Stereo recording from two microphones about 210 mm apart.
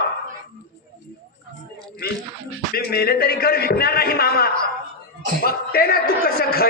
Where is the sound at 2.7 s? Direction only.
45° left (ahead or behind).